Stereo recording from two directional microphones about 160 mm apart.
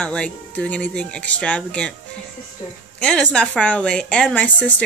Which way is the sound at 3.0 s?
5° left (ahead or behind).